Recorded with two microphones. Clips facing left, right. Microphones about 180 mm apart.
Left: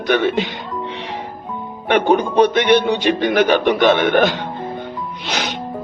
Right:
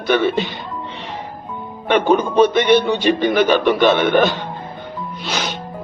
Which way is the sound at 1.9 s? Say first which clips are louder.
Even; 15° left (ahead or behind).